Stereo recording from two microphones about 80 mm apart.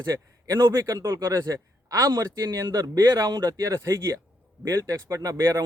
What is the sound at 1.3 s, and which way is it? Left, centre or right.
A man's voice, right.